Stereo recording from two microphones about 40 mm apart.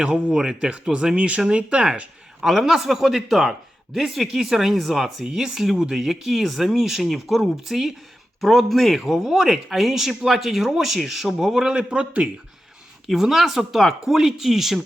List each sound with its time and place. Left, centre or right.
0.0 s speech: centre
1.1 s speech: right
1.5 s speech: right
2.4 s speech: centre
6.0 s speech: centre; by 12.3 s right
13.1 s speech: centre